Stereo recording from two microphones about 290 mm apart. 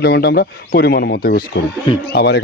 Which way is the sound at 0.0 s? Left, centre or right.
Left.